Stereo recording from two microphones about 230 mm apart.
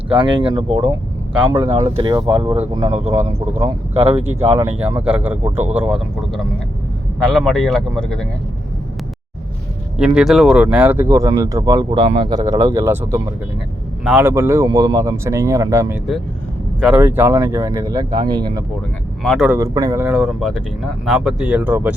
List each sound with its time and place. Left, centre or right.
0.1 s speech: right
3.9 s speech: centre
10.0 s speech: centre
19.2 s speech: centre
19.5 s speech: centre